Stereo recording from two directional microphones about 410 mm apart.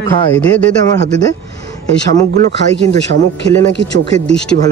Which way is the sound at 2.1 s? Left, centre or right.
Right.